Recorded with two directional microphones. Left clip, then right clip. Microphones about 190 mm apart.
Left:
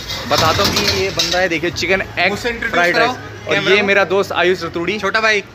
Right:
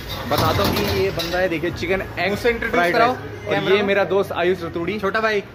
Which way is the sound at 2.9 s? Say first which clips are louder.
Left 2 dB; 50° right (ahead or behind).